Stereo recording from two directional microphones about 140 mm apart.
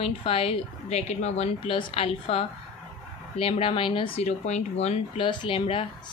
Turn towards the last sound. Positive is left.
turn(degrees=40)  # may be behind; listen again after turning